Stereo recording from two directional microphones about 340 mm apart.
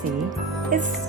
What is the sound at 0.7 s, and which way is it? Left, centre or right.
Speech, right.